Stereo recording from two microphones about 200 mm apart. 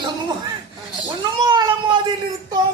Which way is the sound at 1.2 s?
20° right (ahead or behind).